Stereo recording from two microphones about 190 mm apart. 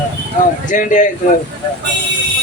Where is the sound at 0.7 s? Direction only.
40° left (ahead or behind).